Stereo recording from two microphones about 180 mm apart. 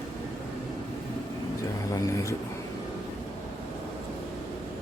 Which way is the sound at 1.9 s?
15° left (ahead or behind).